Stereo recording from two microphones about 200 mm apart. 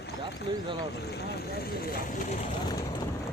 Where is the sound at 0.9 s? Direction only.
55° left (ahead or behind).